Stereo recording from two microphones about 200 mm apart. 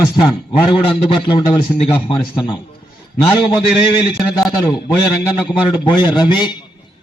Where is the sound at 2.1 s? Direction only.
25° left (ahead or behind).